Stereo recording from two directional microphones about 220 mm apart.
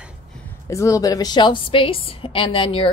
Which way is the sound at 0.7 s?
15° left (ahead or behind).